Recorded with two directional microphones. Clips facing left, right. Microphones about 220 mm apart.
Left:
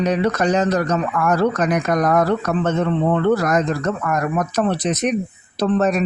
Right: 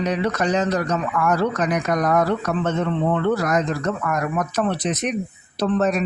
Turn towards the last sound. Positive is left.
turn(degrees=40)  # may be behind; listen again after turning